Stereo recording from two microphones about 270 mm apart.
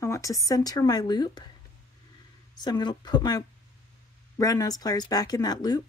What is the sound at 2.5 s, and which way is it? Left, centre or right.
Speech, centre.